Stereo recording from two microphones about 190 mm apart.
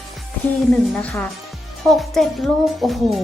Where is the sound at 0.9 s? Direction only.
10° left (ahead or behind).